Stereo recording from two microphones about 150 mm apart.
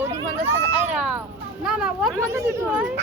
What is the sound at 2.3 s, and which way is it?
Speech, 15° right (ahead or behind).